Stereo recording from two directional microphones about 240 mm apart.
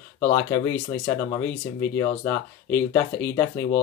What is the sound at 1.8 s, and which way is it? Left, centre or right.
Speech, centre.